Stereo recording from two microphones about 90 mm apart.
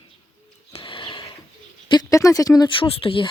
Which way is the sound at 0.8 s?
60° left (ahead or behind).